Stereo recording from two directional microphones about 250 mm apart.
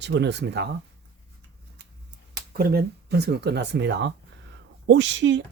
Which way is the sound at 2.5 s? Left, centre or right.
Right.